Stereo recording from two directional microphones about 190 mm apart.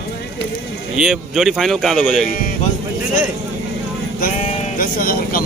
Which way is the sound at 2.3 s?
45° left (ahead or behind).